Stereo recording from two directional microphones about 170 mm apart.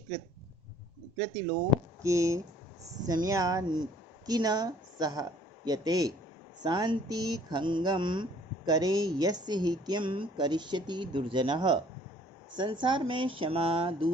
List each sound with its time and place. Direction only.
2.0 s speech: 15° right (ahead or behind)